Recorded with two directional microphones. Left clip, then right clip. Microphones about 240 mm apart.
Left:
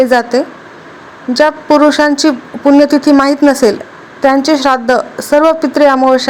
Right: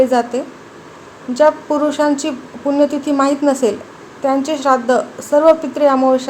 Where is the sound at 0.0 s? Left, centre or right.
Left.